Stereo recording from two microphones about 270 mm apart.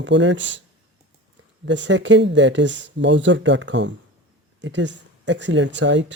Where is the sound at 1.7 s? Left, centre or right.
Right.